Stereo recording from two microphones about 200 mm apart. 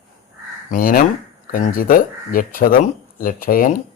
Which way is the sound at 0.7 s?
45° left (ahead or behind).